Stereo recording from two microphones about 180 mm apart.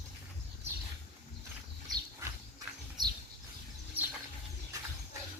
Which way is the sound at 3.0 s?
25° right (ahead or behind).